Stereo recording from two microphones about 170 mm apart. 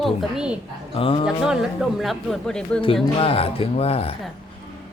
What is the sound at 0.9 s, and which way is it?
Speech, 30° left (ahead or behind).